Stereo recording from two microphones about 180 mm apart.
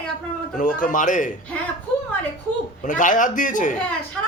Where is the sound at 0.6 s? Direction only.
50° left (ahead or behind).